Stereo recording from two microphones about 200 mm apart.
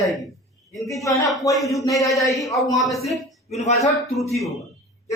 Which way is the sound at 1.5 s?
Centre (ahead or behind).